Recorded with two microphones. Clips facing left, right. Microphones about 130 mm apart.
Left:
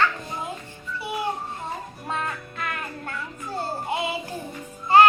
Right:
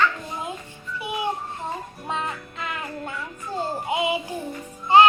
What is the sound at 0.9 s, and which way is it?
Music, 15° right (ahead or behind).